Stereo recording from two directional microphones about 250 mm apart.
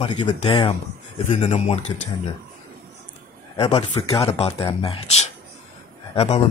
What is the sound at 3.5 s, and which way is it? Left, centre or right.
Speech, left.